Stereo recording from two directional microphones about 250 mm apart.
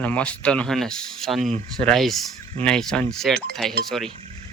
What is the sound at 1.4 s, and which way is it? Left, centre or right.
Speech, right.